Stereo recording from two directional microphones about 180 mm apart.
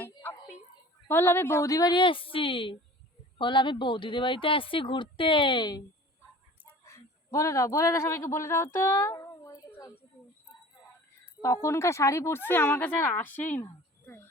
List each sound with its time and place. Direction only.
0.0 s a sound: 10° left (ahead or behind)
1.0 s speech: 10° left (ahead or behind)
6.8 s a man's voice: 15° left (ahead or behind)
11.3 s speech: 15° left (ahead or behind)